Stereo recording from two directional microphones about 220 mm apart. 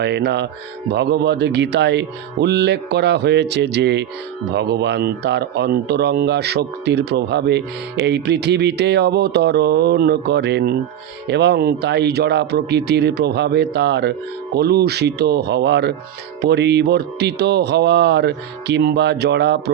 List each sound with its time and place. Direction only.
0.0 s speech: 50° right (ahead or behind)